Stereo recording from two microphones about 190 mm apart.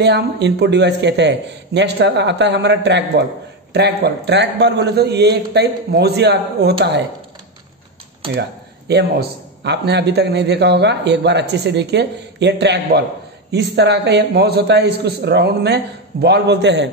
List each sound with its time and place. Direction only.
0.0 s a man's voice: 65° right (ahead or behind)
8.4 s a man's voice: 60° right (ahead or behind)